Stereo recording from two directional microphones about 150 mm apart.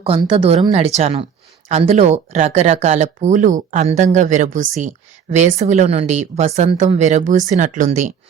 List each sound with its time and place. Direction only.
0.2 s speech: 35° right (ahead or behind); by 8.1 s 55° right (ahead or behind)